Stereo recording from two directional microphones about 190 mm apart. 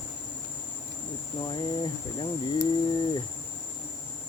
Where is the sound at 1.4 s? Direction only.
25° left (ahead or behind).